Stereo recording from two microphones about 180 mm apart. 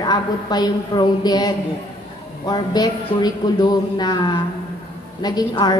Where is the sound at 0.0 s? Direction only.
25° left (ahead or behind).